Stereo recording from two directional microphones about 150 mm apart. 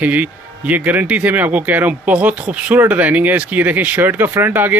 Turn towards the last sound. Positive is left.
turn(degrees=-15)  # may be behind; listen again after turning